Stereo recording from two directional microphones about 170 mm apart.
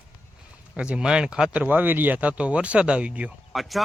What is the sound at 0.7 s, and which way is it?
Speech, 5° right (ahead or behind).